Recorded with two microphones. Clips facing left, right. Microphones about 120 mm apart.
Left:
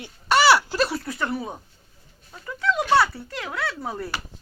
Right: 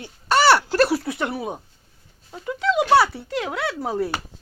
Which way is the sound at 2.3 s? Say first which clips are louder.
Right 3 dB; 15° right (ahead or behind).